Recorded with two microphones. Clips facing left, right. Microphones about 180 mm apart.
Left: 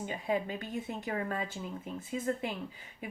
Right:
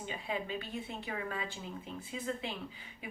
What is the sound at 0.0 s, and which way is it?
Speech, 45° left (ahead or behind).